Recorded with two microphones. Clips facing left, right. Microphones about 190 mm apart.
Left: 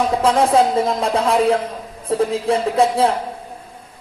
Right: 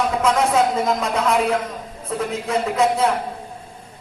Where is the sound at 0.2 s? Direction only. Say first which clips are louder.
Left 3 dB; 30° left (ahead or behind).